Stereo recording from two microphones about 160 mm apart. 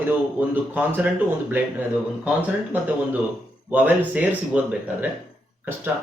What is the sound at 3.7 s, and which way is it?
Speech, 10° right (ahead or behind).